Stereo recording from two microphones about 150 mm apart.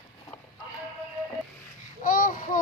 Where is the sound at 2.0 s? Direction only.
65° left (ahead or behind).